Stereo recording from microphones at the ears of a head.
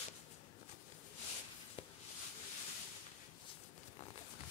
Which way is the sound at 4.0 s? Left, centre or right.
Left.